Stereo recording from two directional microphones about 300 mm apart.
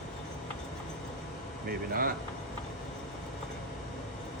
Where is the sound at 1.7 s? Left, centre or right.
Right.